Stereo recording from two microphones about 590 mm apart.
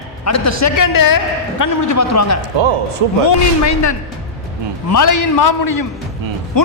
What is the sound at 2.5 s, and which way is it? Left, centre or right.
Speech, right.